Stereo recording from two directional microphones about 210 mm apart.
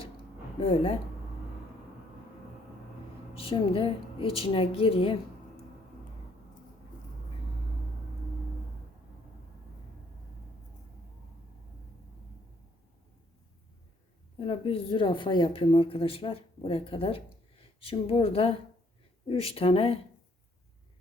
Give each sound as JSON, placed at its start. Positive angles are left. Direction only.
{"t": 0.6, "sound": "a woman's voice", "side_deg": 25}
{"t": 3.3, "sound": "a woman's voice", "side_deg": 25}
{"t": 14.3, "sound": "a woman's voice", "side_deg": 25}